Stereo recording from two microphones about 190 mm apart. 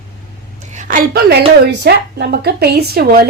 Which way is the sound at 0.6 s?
40° right (ahead or behind).